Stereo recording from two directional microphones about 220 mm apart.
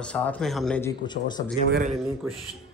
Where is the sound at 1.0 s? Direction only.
20° left (ahead or behind).